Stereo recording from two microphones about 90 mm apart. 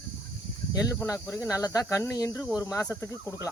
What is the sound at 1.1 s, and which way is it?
Speech, 35° left (ahead or behind).